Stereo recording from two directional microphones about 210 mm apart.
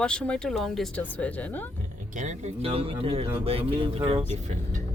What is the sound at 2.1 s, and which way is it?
Speech, 35° right (ahead or behind).